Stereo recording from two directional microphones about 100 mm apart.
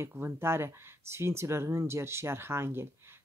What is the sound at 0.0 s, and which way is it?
Speech, 25° right (ahead or behind).